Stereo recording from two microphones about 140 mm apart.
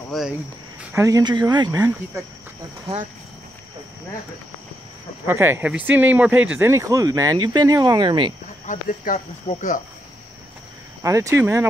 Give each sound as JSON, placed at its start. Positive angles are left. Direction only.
{"t": 0.1, "sound": "speech", "side_deg": 0}
{"t": 0.9, "sound": "speech", "side_deg": -25}
{"t": 5.2, "sound": "speech", "side_deg": -15}
{"t": 8.6, "sound": "speech", "side_deg": 70}
{"t": 11.0, "sound": "speech", "side_deg": -20}